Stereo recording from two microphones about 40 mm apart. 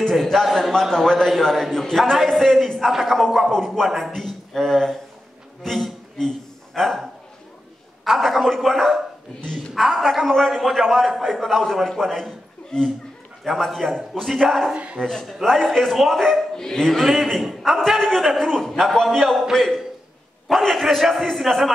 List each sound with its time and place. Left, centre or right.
0.3 s a man's voice: centre
6.1 s a sound: centre
8.0 s a man's voice: centre
12.7 s speech: left
13.4 s a man's voice: centre
20.4 s a man's voice: centre